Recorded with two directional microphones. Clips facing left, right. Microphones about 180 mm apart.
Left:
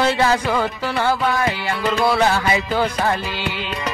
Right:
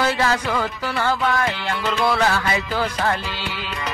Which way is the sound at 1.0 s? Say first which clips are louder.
Left 2 dB; 10° left (ahead or behind).